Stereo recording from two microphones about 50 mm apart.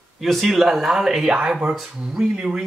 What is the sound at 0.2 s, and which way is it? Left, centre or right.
Speech, centre.